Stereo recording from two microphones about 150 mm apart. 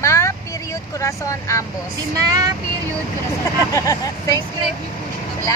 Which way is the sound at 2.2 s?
25° right (ahead or behind).